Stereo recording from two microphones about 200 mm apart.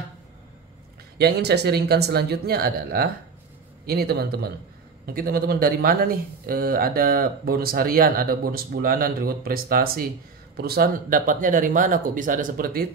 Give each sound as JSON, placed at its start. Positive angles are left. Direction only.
{"t": 1.1, "sound": "speech", "side_deg": -55}